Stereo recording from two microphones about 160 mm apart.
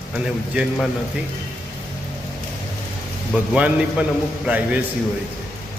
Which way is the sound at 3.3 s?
10° right (ahead or behind).